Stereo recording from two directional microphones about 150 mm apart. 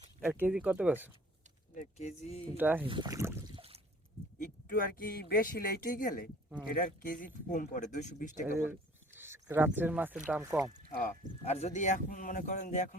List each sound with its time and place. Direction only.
0.2 s speech: 15° right (ahead or behind)
1.7 s speech: 55° left (ahead or behind)
2.6 s speech: 10° right (ahead or behind)
2.8 s speech: 30° right (ahead or behind)
3.2 s boat: 20° right (ahead or behind)
3.5 s a sound: 40° right (ahead or behind)
4.4 s a man's voice: 65° left (ahead or behind)
9.1 s speech: 15° right (ahead or behind)
10.9 s speech: 65° left (ahead or behind)
11.4 s speech: 45° left (ahead or behind)